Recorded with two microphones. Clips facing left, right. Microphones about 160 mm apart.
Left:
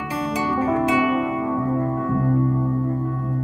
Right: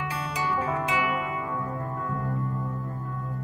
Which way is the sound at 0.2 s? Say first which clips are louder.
Left 8 dB; 35° left (ahead or behind).